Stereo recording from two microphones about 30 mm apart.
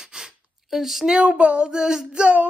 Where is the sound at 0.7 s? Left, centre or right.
Centre.